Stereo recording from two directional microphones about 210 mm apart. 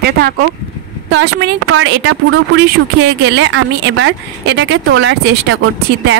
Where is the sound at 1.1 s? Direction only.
60° right (ahead or behind).